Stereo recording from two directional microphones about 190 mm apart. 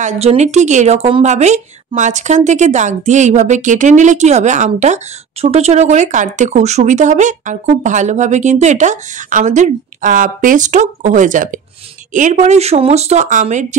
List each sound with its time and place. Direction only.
0.0 s a woman's voice: 35° right (ahead or behind)